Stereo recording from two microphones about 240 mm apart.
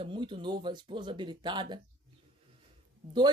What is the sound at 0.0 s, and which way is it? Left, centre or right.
Speech, centre.